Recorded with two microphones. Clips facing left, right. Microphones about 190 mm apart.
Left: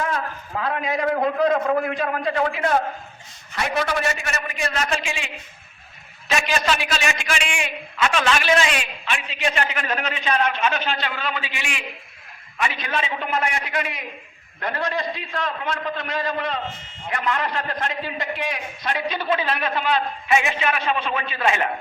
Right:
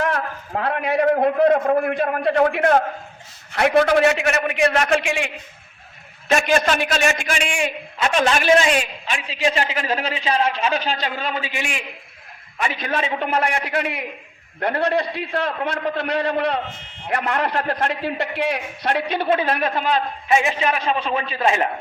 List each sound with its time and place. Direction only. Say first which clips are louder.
0.0 s a sound: right 3 dB; 65° right (ahead or behind)
1.1 s a man's voice: right 3 dB; 55° right (ahead or behind)
6.3 s a man's voice: right 5 dB; 50° right (ahead or behind)
13.3 s a man's voice: right 2 dB; 55° right (ahead or behind); by 21.7 s 35° right (ahead or behind)